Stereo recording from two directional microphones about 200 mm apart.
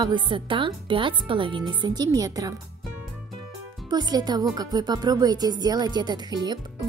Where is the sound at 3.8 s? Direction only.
20° right (ahead or behind).